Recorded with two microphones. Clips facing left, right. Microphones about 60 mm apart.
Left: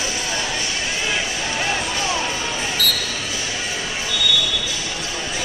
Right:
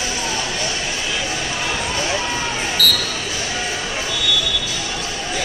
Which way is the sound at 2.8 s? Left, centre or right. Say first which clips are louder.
Right 4 dB; right.